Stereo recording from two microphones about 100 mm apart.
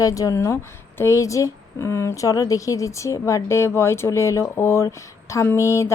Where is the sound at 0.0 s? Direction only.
35° left (ahead or behind).